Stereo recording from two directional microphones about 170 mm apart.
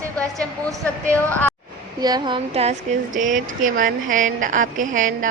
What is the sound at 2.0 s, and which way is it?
Speech, 25° right (ahead or behind).